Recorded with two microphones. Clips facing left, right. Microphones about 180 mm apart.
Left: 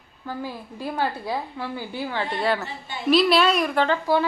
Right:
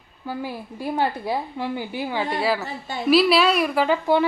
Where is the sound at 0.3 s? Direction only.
10° right (ahead or behind).